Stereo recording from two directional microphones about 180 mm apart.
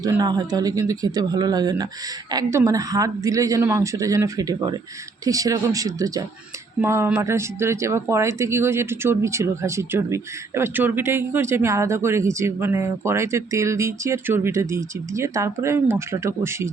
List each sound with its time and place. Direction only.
0.0 s speech: 20° right (ahead or behind)